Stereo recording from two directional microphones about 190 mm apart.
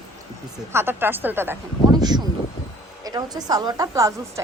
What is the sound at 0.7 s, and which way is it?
Speech, 10° right (ahead or behind).